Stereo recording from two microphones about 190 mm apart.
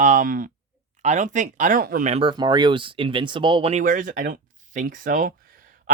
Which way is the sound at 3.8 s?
45° right (ahead or behind).